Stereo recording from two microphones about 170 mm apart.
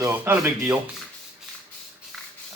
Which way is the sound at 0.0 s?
10° right (ahead or behind).